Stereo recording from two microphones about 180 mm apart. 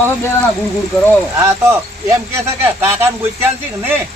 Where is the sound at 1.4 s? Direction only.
15° right (ahead or behind).